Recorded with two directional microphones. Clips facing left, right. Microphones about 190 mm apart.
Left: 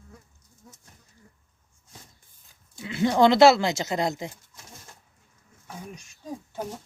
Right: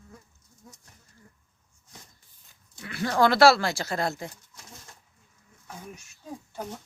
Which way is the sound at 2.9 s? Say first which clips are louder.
Left 4 dB; 20° left (ahead or behind).